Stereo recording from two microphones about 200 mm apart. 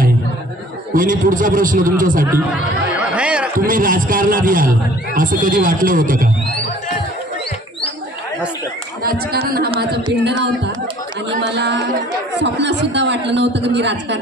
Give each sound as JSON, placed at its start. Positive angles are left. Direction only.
{"t": 0.9, "sound": "speech", "side_deg": -40}
{"t": 3.2, "sound": "a sound", "side_deg": -5}
{"t": 3.6, "sound": "speech", "side_deg": -45}
{"t": 9.0, "sound": "chatter", "side_deg": -50}
{"t": 11.4, "sound": "a woman's voice", "side_deg": -60}